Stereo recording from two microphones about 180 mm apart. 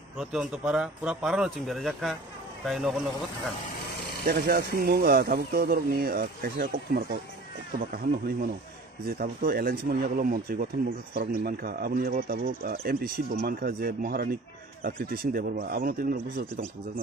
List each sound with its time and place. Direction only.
0.2 s speech: 5° right (ahead or behind)
4.3 s speech: 55° right (ahead or behind)
9.0 s speech: 55° right (ahead or behind)